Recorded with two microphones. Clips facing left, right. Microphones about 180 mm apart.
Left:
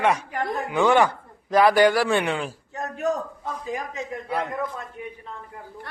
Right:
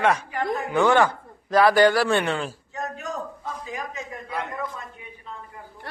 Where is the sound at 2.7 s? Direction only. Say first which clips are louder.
Left 5 dB; 60° left (ahead or behind).